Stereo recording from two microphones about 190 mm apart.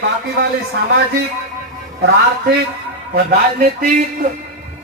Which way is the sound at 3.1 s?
50° right (ahead or behind).